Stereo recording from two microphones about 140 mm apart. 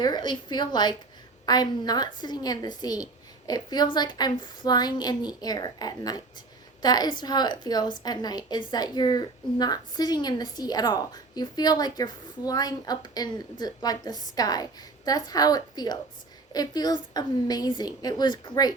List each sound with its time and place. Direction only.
0.0 s a woman's voice: 30° left (ahead or behind)